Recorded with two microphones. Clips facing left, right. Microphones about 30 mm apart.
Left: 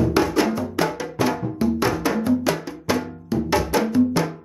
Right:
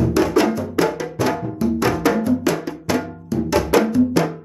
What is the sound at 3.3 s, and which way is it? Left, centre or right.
Music, left.